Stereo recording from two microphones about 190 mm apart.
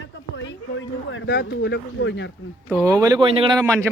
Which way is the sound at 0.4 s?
80° left.